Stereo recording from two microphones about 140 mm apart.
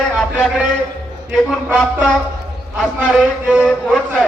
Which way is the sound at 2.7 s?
Centre (ahead or behind).